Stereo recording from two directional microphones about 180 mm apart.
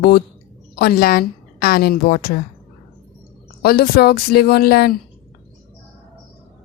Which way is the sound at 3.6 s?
60° left (ahead or behind).